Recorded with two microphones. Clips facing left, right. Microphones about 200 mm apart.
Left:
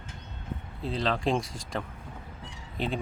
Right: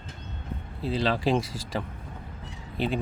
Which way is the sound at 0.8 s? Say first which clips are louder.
Right 3 dB; 5° right (ahead or behind).